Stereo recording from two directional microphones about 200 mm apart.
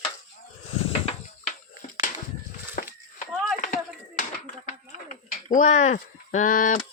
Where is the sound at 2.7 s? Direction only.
45° left (ahead or behind).